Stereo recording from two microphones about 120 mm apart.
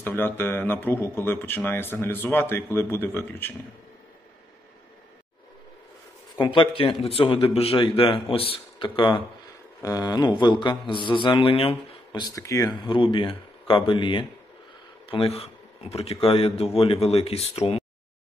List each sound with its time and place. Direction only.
0.0 s speech: 15° left (ahead or behind)
6.3 s speech: 45° left (ahead or behind)
9.8 s speech: 30° left (ahead or behind)
12.7 s speech: 40° left (ahead or behind); by 17.8 s 60° left (ahead or behind)